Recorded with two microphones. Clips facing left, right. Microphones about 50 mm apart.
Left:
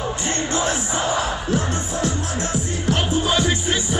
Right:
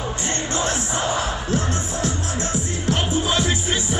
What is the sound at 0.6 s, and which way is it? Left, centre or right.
Music, centre.